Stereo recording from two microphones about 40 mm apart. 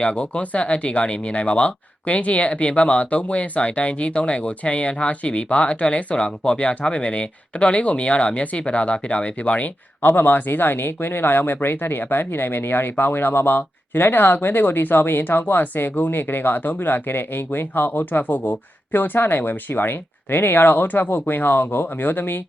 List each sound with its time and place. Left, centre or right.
0.0 s speech: left
10.1 s speech: left